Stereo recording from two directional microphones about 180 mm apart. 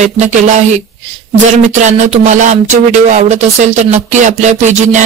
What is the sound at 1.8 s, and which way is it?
Speech, 40° right (ahead or behind).